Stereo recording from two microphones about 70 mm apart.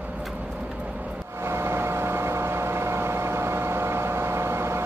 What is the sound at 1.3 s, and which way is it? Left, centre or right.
Vehicle, right.